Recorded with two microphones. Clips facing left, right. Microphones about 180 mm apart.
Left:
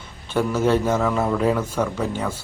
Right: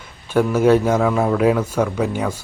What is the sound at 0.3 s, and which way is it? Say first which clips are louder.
Speech: right 5 dB; 10° right (ahead or behind).